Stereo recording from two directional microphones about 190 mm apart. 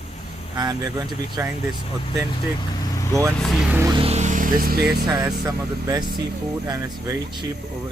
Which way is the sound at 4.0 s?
35° right (ahead or behind).